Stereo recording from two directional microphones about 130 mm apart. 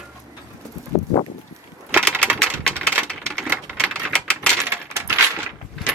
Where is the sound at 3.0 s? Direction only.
5° left (ahead or behind).